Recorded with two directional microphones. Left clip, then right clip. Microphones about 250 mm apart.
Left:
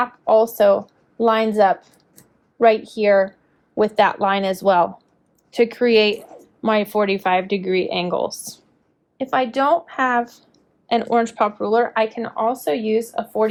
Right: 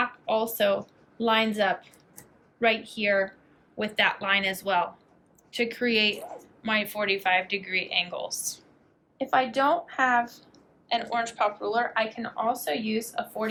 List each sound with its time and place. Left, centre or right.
0.3 s a woman's voice: centre